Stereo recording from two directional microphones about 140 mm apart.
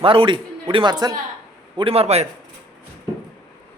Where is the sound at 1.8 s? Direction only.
45° right (ahead or behind).